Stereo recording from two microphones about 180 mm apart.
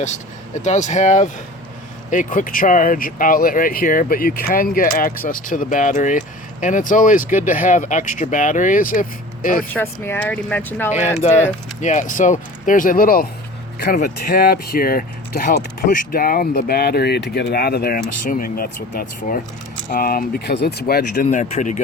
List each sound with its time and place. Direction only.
0.0 s speech: 40° left (ahead or behind)
9.7 s speech: 10° left (ahead or behind)
11.2 s speech: 35° left (ahead or behind); by 21.2 s 60° left (ahead or behind)
21.2 s speech: 40° left (ahead or behind)